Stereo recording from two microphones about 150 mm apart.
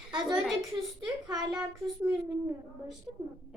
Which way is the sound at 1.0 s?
25° right (ahead or behind).